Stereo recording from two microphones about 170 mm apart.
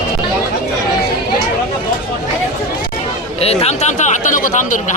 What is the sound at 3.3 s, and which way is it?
Speech, 35° left (ahead or behind).